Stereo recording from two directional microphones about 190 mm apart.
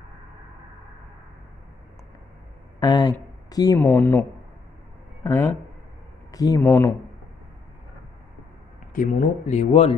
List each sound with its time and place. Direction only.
2.8 s speech: 20° left (ahead or behind)
8.9 s speech: 40° left (ahead or behind)